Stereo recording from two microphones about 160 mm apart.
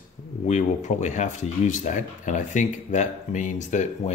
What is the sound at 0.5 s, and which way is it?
Speech, 50° left (ahead or behind).